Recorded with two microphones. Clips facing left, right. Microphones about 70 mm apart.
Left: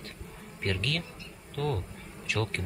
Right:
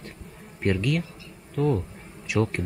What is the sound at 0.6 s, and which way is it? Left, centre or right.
A man's voice, centre.